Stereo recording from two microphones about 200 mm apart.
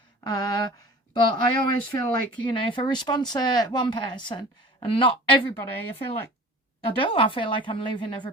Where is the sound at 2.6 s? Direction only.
25° left (ahead or behind).